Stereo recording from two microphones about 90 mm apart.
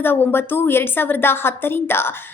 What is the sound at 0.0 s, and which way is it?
A woman's voice, 25° left (ahead or behind).